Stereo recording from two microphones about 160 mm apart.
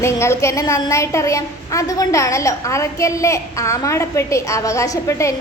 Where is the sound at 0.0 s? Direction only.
15° left (ahead or behind).